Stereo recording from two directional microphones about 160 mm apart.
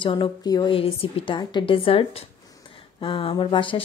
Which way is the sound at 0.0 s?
30° left (ahead or behind).